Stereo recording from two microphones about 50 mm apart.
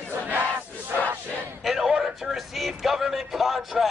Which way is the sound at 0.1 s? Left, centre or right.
Right.